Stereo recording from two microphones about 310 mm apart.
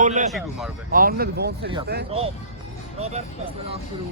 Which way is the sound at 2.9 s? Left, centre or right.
Centre.